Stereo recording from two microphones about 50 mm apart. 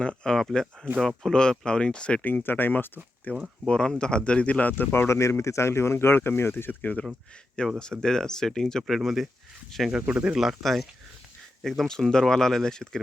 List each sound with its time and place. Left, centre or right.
0.0 s speech: centre
0.9 s speech: centre
1.3 s speech: centre
2.2 s speech: left
3.7 s speech: centre; by 5.0 s left
5.0 s speech: left
6.6 s speech: left
7.6 s speech: centre
9.0 s speech: centre
10.1 s speech: right
10.3 s speech: centre